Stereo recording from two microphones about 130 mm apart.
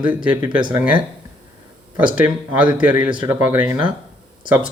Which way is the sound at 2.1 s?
10° right (ahead or behind).